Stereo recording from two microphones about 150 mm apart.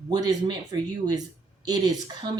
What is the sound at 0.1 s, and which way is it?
Speech, 25° right (ahead or behind).